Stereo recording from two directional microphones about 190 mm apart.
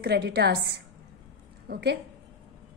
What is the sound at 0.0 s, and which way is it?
A woman's voice, 60° right (ahead or behind).